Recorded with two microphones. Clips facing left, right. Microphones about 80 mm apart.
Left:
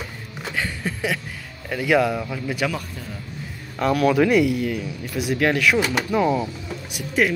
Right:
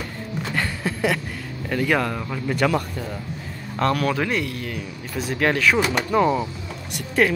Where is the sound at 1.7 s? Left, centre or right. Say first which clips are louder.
Left 2 dB; centre.